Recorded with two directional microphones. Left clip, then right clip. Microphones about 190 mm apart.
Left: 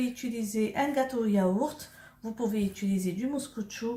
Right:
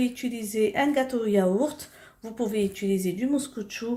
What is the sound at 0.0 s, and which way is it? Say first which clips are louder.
Speech: right 4 dB; 35° right (ahead or behind).